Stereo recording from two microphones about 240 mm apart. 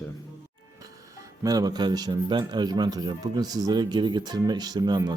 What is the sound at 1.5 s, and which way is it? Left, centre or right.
A man's voice, centre.